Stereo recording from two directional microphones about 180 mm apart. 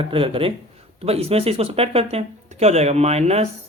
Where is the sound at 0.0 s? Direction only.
30° right (ahead or behind).